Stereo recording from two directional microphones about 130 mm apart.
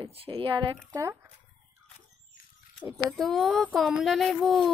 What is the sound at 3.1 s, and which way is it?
Speech, centre (ahead or behind).